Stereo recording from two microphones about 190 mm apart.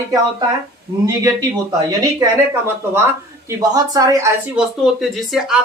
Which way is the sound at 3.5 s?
20° right (ahead or behind).